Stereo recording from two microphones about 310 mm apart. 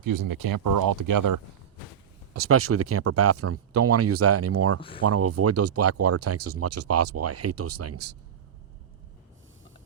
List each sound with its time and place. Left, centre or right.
0.0 s speech: right
2.3 s speech: right
4.8 s speech: centre
5.0 s speech: right